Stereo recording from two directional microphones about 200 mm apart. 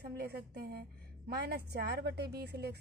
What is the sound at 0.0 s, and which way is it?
A woman's voice, 55° right (ahead or behind).